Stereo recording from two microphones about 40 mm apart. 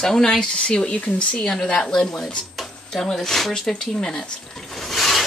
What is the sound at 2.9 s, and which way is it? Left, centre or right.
Speech, centre.